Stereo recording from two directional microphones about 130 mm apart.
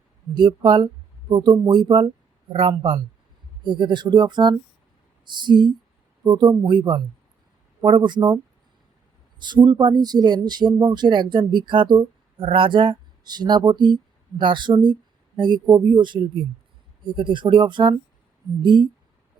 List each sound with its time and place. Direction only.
0.3 s speech: 35° right (ahead or behind)
1.7 s speech: 40° right (ahead or behind)
9.4 s speech: 35° right (ahead or behind)